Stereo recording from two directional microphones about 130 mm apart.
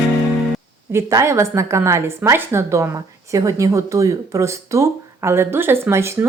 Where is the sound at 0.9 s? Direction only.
20° right (ahead or behind).